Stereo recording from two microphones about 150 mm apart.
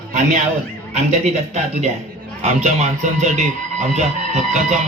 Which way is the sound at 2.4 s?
45° right (ahead or behind).